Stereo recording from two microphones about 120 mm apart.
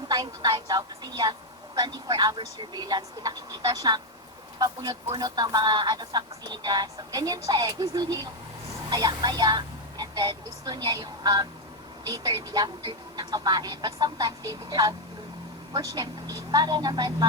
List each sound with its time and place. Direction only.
0.1 s speech: 35° right (ahead or behind)